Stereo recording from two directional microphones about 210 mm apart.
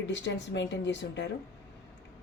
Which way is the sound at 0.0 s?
60° left (ahead or behind).